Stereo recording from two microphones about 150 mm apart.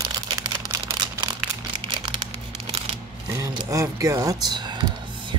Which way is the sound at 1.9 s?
35° right (ahead or behind).